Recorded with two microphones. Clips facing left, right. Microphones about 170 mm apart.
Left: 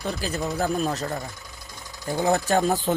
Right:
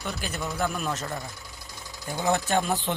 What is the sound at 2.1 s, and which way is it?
Speech, 35° left (ahead or behind).